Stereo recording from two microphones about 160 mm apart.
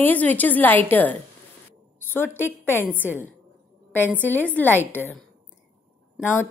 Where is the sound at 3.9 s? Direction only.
10° left (ahead or behind).